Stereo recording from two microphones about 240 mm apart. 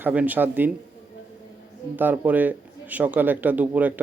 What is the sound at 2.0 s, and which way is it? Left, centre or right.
A man's voice, centre.